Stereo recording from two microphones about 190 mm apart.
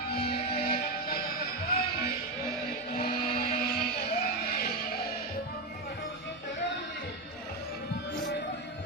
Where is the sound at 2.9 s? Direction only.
50° left (ahead or behind).